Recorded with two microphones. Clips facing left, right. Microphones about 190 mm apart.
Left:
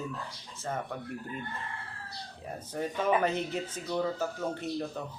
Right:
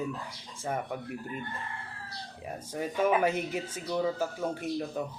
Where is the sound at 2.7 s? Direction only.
10° right (ahead or behind).